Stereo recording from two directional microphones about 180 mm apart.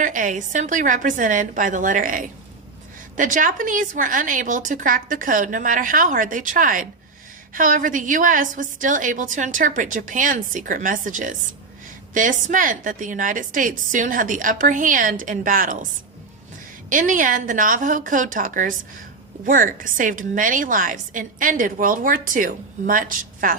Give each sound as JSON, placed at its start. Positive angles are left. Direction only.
{"t": 0.0, "sound": "a woman's voice", "side_deg": -45}
{"t": 16.9, "sound": "a woman's voice", "side_deg": -50}